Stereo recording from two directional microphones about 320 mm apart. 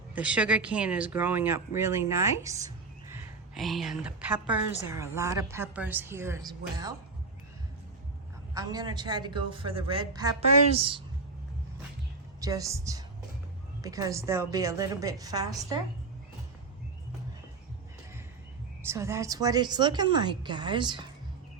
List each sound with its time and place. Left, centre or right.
0.1 s a woman's voice: centre
8.5 s a woman's voice: centre
12.4 s a woman's voice: centre
18.9 s a woman's voice: centre